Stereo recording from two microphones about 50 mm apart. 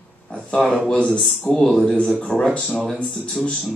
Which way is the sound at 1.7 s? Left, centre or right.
Centre.